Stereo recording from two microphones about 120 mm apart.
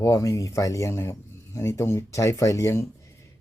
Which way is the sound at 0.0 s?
25° left (ahead or behind).